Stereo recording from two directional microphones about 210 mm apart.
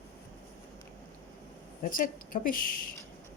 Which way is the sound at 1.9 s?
40° left (ahead or behind).